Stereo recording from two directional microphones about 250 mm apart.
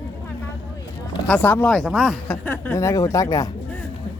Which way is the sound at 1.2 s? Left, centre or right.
Centre.